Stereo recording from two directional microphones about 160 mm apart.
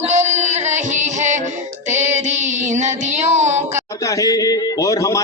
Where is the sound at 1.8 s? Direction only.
50° right (ahead or behind).